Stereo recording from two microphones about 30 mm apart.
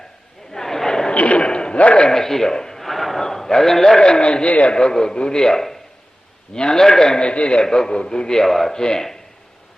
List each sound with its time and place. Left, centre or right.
0.5 s a sound: centre
1.1 s a sound: left
1.4 s a sound: left
1.7 s a man's voice: left
2.0 s a man's voice: centre
2.8 s a sound: centre
3.9 s a man's voice: left
4.4 s a man's voice: left
4.7 s a man's voice: left
7.2 s a man's voice: left
7.6 s a man's voice: centre
8.4 s speech: centre
8.7 s a man's voice: left